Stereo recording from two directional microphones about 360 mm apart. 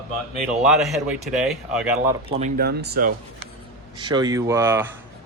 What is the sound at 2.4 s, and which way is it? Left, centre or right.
Speech, right.